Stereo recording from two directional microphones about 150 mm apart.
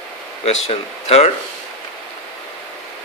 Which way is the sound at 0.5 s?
45° left (ahead or behind).